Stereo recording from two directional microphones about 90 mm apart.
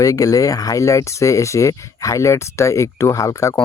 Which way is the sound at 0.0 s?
40° left (ahead or behind).